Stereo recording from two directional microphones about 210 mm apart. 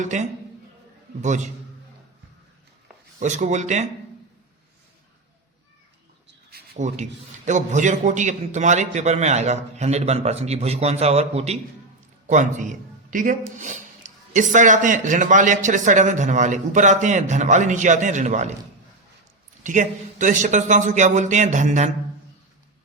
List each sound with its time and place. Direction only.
0.0 s a man's voice: 35° right (ahead or behind)
3.2 s a man's voice: 35° right (ahead or behind)
6.5 s a man's voice: 35° right (ahead or behind)
14.3 s a man's voice: 35° right (ahead or behind)
19.6 s a man's voice: 35° right (ahead or behind)